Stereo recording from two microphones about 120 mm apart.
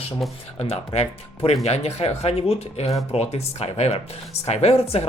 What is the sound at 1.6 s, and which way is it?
Speech, 60° left (ahead or behind).